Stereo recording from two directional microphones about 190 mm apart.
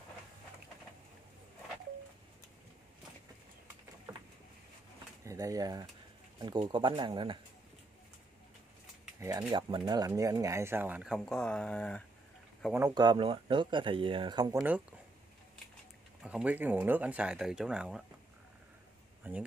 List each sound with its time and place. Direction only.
5.2 s speech: 15° right (ahead or behind)
9.2 s speech: 15° right (ahead or behind); by 12.0 s 5° left (ahead or behind)
12.7 s speech: 20° right (ahead or behind)
14.6 s speech: 10° right (ahead or behind)
16.2 s speech: 5° right (ahead or behind)
19.2 s speech: 10° right (ahead or behind)